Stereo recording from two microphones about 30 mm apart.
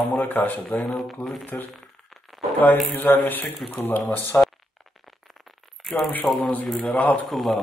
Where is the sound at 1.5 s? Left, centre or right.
Left.